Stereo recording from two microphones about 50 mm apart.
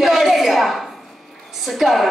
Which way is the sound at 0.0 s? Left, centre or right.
Centre.